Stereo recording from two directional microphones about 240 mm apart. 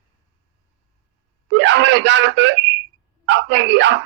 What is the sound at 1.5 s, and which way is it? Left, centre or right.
Speech, right.